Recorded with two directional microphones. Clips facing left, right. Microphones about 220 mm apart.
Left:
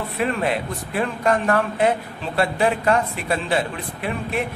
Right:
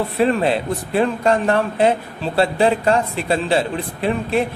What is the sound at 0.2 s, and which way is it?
A man's voice, 30° right (ahead or behind).